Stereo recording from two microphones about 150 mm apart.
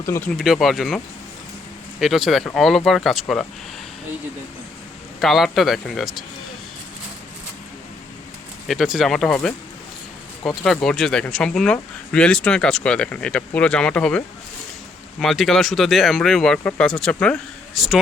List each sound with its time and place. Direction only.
0.0 s speech: 20° left (ahead or behind)
0.3 s speech: centre (ahead or behind)
2.0 s speech: centre (ahead or behind)
5.2 s speech: centre (ahead or behind)
8.6 s speech: centre (ahead or behind)
10.6 s speech: 5° left (ahead or behind)